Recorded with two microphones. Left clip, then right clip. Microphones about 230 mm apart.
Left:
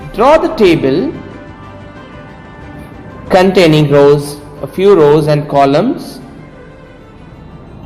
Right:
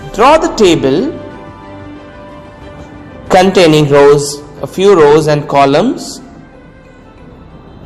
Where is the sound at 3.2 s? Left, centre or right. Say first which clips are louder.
Right 1 dB; right.